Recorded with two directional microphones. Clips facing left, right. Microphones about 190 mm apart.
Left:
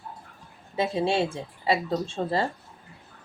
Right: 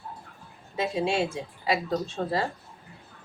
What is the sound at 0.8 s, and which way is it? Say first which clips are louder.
Speech: left 2 dB; 30° left (ahead or behind).